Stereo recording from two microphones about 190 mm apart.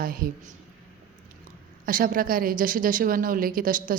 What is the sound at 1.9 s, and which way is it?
A woman's voice, 50° right (ahead or behind).